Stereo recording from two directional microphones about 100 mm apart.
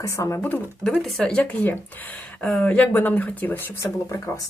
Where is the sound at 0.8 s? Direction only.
5° left (ahead or behind); by 3.8 s 20° left (ahead or behind).